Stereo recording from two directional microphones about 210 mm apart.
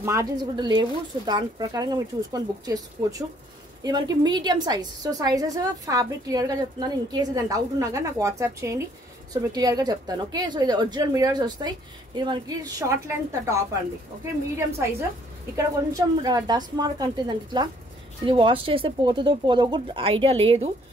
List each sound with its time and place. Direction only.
0.0 s a woman's voice: 15° right (ahead or behind)
15.5 s speech: 15° right (ahead or behind)